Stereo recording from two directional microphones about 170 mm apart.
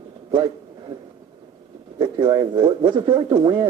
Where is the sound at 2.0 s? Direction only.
25° right (ahead or behind).